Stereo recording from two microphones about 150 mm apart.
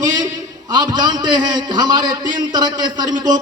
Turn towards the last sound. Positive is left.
turn(degrees=-30)  # may be behind; listen again after turning